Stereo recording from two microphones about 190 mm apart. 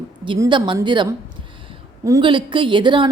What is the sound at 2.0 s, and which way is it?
A woman's voice, 20° right (ahead or behind).